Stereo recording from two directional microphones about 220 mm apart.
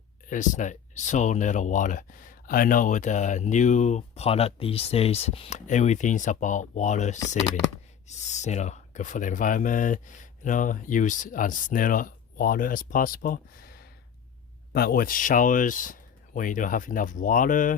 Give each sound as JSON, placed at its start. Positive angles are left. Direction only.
{"t": 0.3, "sound": "speech", "side_deg": 35}